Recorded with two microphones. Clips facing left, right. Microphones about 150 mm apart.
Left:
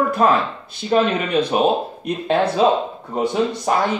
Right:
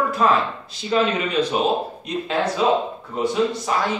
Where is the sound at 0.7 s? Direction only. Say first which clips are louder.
Left 3 dB; 55° left (ahead or behind).